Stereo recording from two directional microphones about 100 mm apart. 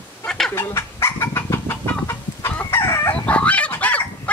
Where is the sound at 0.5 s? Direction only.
25° left (ahead or behind).